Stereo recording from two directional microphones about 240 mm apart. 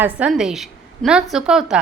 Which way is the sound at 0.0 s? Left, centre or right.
Centre.